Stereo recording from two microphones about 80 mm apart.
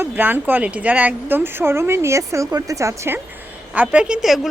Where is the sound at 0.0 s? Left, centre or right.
Right.